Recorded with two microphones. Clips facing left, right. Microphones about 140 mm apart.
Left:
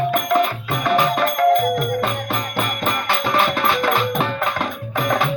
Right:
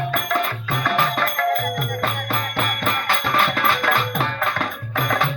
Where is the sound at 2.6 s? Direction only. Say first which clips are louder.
Left 2 dB; centre (ahead or behind).